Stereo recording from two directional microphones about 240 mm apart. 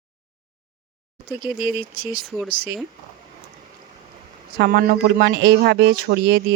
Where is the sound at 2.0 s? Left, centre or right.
Right.